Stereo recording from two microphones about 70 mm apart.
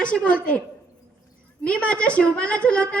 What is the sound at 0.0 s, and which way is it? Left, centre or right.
Speech, centre.